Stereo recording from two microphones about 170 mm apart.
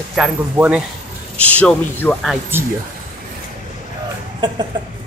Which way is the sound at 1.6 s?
10° left (ahead or behind).